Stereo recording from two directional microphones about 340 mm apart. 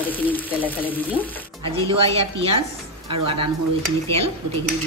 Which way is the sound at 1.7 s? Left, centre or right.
Centre.